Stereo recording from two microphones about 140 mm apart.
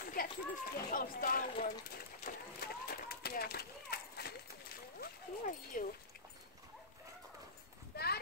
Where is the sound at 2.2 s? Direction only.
90° left.